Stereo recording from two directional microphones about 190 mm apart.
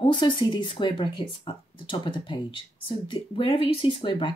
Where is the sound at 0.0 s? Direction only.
25° left (ahead or behind).